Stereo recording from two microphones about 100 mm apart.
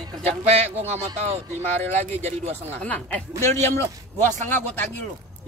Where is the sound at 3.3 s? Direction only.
25° left (ahead or behind).